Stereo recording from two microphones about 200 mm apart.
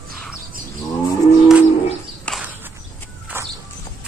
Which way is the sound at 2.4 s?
10° right (ahead or behind).